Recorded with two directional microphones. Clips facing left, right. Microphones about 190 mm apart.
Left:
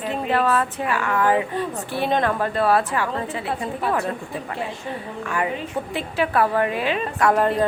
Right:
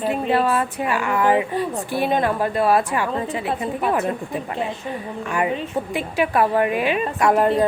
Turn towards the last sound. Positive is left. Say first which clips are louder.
# right 2 dB
turn(degrees=-10)  # may be behind; listen again after turning